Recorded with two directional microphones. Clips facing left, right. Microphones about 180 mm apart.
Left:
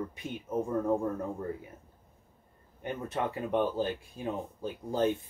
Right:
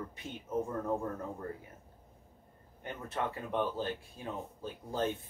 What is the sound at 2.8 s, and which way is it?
Speech, 15° left (ahead or behind).